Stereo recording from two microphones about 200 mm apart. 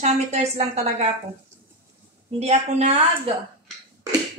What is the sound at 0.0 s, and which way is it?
Speech, 35° right (ahead or behind).